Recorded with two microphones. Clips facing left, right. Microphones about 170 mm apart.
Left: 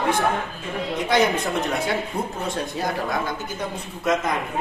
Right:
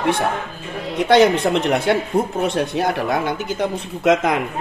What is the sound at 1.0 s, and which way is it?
Speech, 70° right (ahead or behind).